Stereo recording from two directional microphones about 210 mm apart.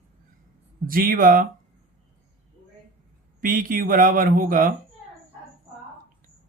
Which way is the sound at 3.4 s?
40° right (ahead or behind).